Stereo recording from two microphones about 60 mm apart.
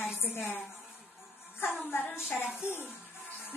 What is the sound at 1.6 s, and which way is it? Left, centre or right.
Speech, left.